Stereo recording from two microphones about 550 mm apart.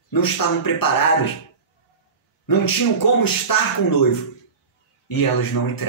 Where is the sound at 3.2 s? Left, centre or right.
Left.